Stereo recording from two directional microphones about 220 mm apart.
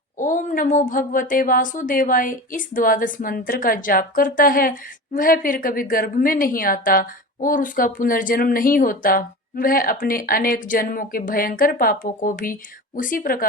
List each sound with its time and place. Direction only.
0.2 s speech: 35° left (ahead or behind)